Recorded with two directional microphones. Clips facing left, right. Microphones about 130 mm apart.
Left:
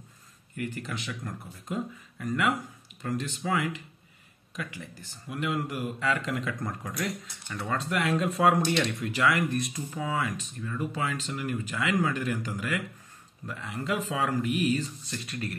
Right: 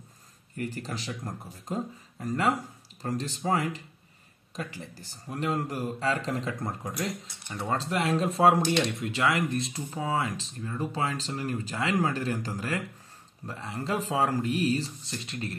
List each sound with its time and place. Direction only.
0.6 s speech: 35° right (ahead or behind)